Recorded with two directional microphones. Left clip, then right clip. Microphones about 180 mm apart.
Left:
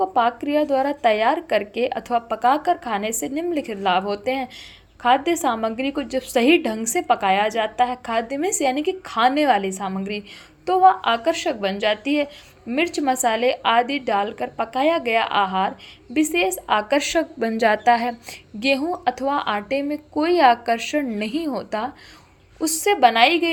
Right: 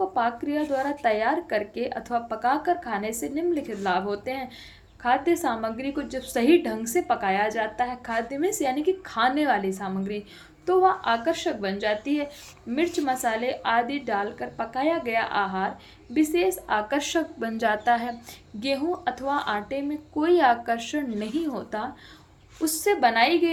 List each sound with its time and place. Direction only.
0.0 s a woman's voice: 35° left (ahead or behind)